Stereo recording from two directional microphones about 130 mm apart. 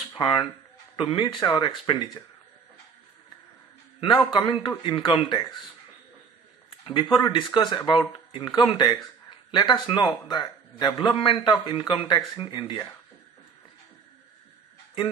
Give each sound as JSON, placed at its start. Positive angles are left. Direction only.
{"t": 0.1, "sound": "speech", "side_deg": 40}
{"t": 4.3, "sound": "speech", "side_deg": 40}
{"t": 6.8, "sound": "a sound", "side_deg": 40}
{"t": 7.2, "sound": "speech", "side_deg": 35}